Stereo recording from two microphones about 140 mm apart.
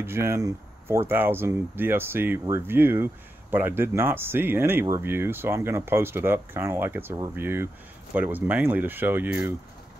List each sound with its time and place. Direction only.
0.0 s speech: 20° right (ahead or behind)